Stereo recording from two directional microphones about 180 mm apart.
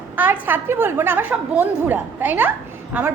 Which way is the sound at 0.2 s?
10° right (ahead or behind).